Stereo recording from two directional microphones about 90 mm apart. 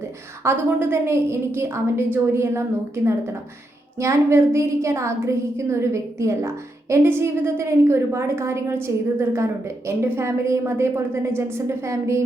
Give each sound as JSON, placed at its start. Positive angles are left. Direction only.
{"t": 0.4, "sound": "a woman's voice", "side_deg": -30}